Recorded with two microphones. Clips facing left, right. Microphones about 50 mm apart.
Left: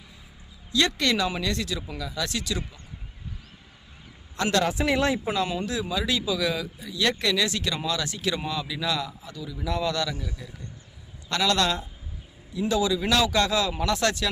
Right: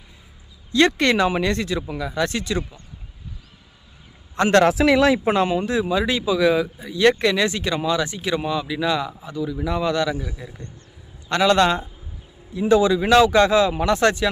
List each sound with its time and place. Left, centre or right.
0.9 s speech: right
4.6 s speech: right
5.5 s a man's voice: right
11.3 s speech: right